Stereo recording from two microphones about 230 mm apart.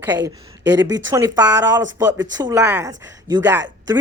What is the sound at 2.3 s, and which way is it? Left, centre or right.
Speech, centre.